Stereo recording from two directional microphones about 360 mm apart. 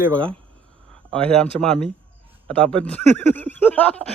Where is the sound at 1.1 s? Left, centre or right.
Centre.